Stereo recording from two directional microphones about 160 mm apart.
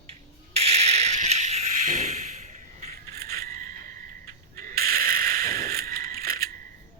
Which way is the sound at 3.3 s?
65° right (ahead or behind).